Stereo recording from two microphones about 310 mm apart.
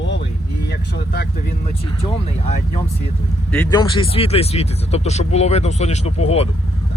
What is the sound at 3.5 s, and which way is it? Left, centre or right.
Speech, centre.